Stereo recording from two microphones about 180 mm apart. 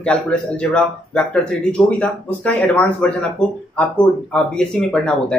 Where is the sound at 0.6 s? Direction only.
5° left (ahead or behind).